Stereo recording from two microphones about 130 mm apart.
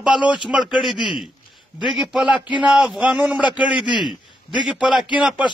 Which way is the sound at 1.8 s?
5° right (ahead or behind).